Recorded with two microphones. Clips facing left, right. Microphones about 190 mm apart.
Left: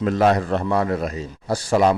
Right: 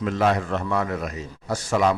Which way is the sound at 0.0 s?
40° left (ahead or behind).